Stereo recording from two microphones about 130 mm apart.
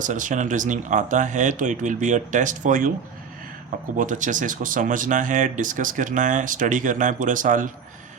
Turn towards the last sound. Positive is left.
turn(degrees=-80)